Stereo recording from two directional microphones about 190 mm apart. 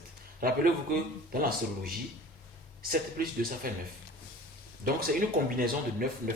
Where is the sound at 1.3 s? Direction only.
50° right (ahead or behind).